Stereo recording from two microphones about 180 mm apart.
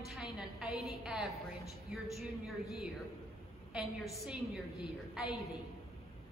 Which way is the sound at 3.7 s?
Centre (ahead or behind).